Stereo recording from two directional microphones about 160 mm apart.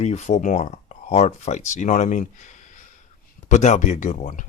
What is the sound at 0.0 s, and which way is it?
Speech, 45° left (ahead or behind).